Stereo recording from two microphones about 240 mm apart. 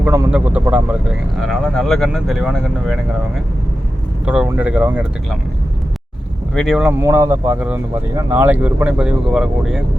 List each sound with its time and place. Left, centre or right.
0.0 s speech: centre
4.3 s speech: centre
6.5 s speech: centre